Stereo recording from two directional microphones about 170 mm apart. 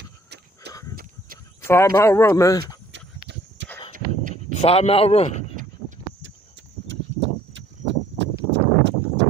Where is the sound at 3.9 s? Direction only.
50° right (ahead or behind).